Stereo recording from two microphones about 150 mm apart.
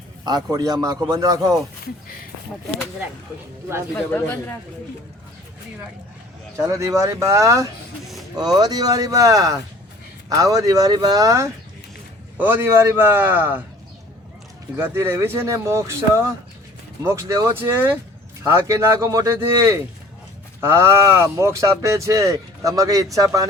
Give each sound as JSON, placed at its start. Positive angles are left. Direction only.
{"t": 0.3, "sound": "speech", "side_deg": -25}
{"t": 3.9, "sound": "speech", "side_deg": 15}
{"t": 6.7, "sound": "speech", "side_deg": -20}
{"t": 14.8, "sound": "speech", "side_deg": -15}